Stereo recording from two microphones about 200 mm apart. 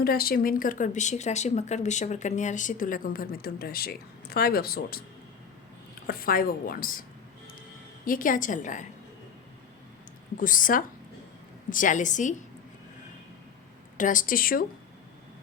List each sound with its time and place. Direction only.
0.0 s speech: 50° left (ahead or behind)
6.1 s speech: 45° left (ahead or behind)
8.0 s a woman's voice: 45° left (ahead or behind)
10.3 s a woman's voice: 45° left (ahead or behind)
13.9 s speech: 40° left (ahead or behind)